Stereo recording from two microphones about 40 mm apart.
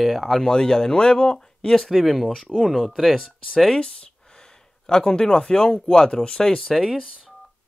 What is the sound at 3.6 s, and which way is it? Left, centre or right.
Speech, left.